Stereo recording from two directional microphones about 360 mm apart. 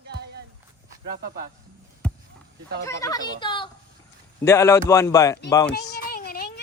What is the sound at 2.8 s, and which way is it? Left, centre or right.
Speech, centre.